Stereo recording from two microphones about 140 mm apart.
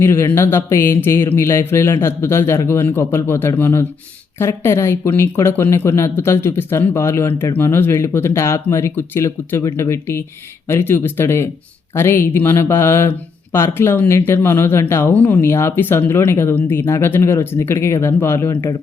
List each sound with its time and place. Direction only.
0.0 s a man's voice: 15° left (ahead or behind)